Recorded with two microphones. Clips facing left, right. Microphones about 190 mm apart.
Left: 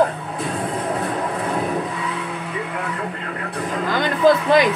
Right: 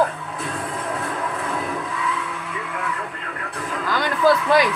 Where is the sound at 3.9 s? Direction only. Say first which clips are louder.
Left 2 dB; 20° left (ahead or behind).